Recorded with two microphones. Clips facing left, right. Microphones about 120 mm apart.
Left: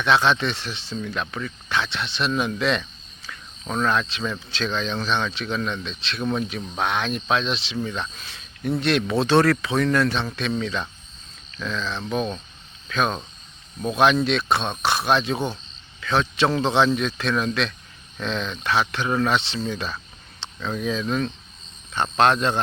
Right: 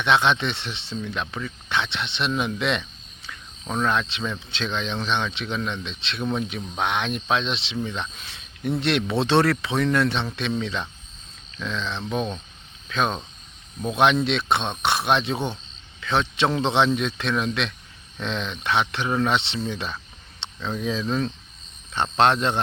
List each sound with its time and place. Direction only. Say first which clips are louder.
0.0 s speech: left 1 dB; 20° right (ahead or behind)
3.6 s cricket: left 1 dB; 10° right (ahead or behind)
4.3 s speech: left 2 dB; 20° right (ahead or behind)
8.1 s cricket: left 1 dB; 25° right (ahead or behind)
8.8 s speech: left 2 dB; 25° right (ahead or behind)
13.8 s speech: left 1 dB; 20° right (ahead or behind)